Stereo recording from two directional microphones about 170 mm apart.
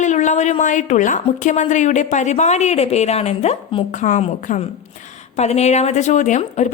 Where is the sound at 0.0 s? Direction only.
45° left (ahead or behind).